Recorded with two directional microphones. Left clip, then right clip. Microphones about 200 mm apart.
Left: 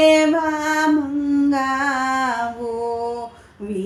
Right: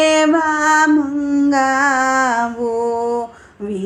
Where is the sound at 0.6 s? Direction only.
15° right (ahead or behind).